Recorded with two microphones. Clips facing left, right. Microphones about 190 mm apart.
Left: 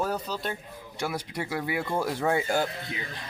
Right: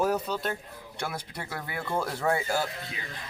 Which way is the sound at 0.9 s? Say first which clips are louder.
Left 4 dB; 10° left (ahead or behind).